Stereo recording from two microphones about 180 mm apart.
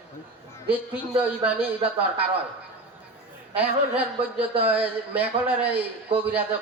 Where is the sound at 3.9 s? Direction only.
30° right (ahead or behind).